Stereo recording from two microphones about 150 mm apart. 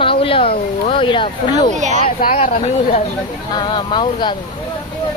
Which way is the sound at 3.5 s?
30° left (ahead or behind).